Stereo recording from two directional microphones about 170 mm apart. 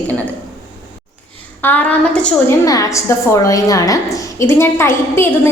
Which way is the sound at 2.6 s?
20° left (ahead or behind).